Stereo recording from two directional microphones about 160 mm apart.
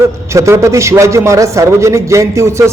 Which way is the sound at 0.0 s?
20° right (ahead or behind).